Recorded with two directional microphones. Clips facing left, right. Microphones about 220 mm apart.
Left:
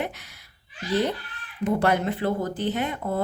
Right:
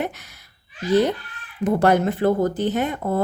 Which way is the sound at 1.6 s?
45° right (ahead or behind).